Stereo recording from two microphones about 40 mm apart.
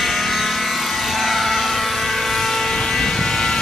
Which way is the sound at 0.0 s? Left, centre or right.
Centre.